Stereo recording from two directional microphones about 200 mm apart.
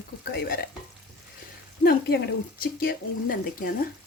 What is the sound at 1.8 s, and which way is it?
Speech, 50° left (ahead or behind).